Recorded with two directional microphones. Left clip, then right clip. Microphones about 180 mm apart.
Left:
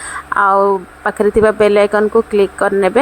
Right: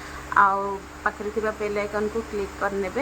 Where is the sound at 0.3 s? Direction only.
45° left (ahead or behind).